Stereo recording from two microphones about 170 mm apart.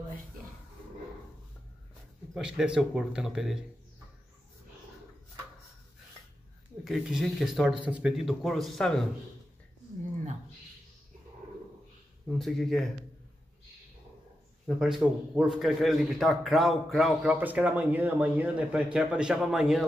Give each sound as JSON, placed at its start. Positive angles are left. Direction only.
{"t": 2.3, "sound": "a man's voice", "side_deg": -5}
{"t": 6.8, "sound": "a man's voice", "side_deg": 0}
{"t": 12.3, "sound": "a man's voice", "side_deg": 0}
{"t": 14.8, "sound": "a man's voice", "side_deg": -5}